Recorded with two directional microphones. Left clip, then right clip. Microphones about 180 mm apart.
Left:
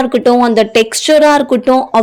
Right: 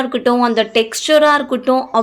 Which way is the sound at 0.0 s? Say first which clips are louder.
Left 5 dB; 30° left (ahead or behind).